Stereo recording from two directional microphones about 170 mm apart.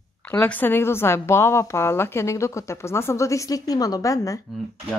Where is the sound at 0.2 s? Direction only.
10° left (ahead or behind).